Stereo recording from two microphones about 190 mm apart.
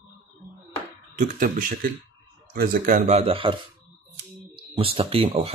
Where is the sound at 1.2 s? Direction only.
45° right (ahead or behind).